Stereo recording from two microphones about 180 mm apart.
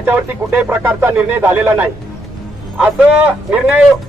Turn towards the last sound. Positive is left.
turn(degrees=-5)  # may be behind; listen again after turning